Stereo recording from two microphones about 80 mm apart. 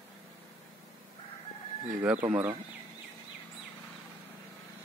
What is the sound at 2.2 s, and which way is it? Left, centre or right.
Speech, right.